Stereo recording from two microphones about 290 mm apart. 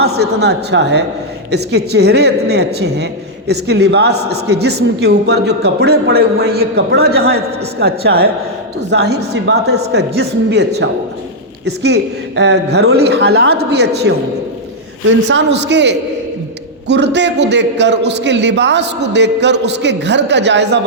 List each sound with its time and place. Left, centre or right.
0.0 s speech: right